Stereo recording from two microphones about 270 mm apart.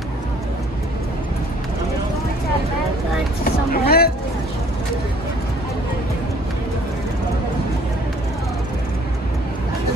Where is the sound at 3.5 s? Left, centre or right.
Left.